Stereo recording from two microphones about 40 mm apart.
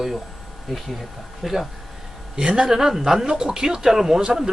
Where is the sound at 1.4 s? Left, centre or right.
Centre.